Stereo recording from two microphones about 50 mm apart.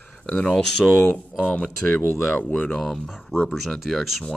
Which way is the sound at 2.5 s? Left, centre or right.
Left.